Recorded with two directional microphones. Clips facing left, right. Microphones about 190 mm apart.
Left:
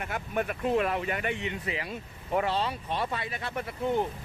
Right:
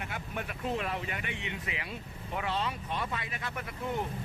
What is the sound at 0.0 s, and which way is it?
Speech, 50° left (ahead or behind).